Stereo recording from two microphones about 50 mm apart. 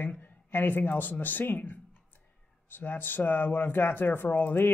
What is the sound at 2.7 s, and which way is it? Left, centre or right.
Speech, left.